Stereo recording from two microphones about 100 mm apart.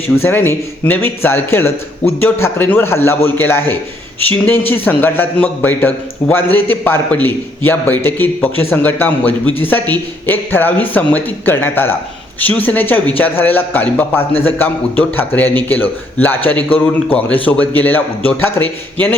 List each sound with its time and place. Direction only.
0.2 s a man's voice: 20° left (ahead or behind)